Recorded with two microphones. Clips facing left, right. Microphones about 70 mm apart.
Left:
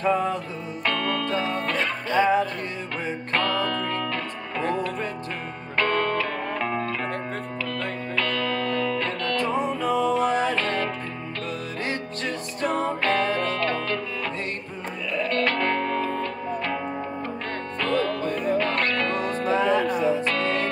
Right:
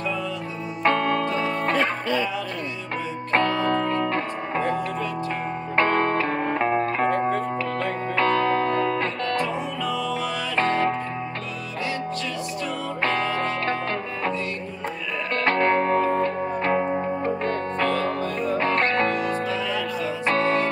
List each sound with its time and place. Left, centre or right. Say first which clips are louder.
0.0 s music: left 5 dB; left
0.8 s music: right 5 dB; right
2.1 s music: left 11 dB; left
3.3 s music: right 4 dB; right
5.8 s music: right 2 dB; right
9.5 s music: left 3 dB; left
12.6 s music: left 10 dB; left
13.6 s music: even; right
15.4 s music: right 4 dB; right
19.4 s music: left 5 dB; left
20.3 s music: right 4 dB; right